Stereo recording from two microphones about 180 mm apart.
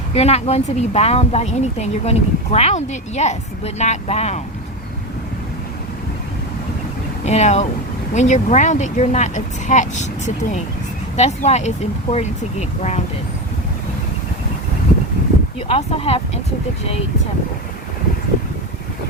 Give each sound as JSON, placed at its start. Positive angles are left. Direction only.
{"t": 0.1, "sound": "speech", "side_deg": 35}
{"t": 7.3, "sound": "speech", "side_deg": 40}
{"t": 15.6, "sound": "speech", "side_deg": 35}